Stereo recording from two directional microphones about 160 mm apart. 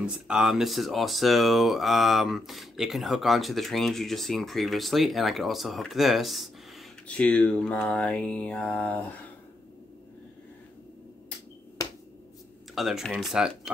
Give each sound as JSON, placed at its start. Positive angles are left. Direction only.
{"t": 0.0, "sound": "speech", "side_deg": -5}
{"t": 7.1, "sound": "mantra", "side_deg": 5}
{"t": 11.8, "sound": "finger snapping", "side_deg": 25}
{"t": 12.7, "sound": "speech", "side_deg": 0}